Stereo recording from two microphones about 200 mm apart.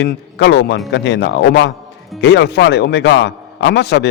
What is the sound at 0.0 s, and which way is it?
Speech, 60° left (ahead or behind).